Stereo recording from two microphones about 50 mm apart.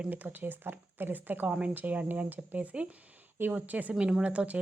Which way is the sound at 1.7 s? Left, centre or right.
Right.